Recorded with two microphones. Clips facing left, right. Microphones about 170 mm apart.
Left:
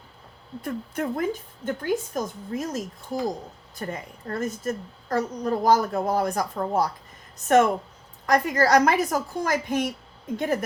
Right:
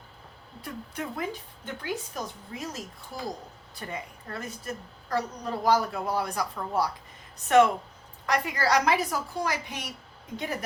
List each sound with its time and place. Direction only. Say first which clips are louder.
0.6 s a woman's voice: left 7 dB; 50° left (ahead or behind)